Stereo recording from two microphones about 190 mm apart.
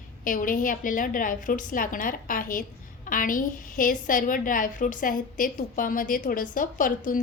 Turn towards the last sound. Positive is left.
turn(degrees=45)  # may be behind; listen again after turning